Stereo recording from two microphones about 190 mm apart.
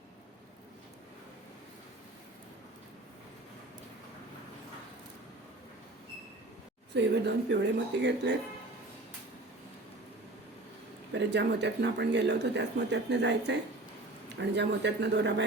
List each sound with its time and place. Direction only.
6.9 s speech: 65° right (ahead or behind)
11.1 s speech: 65° right (ahead or behind)